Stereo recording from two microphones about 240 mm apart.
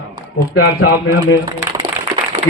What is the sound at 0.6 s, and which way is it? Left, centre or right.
Speech, left.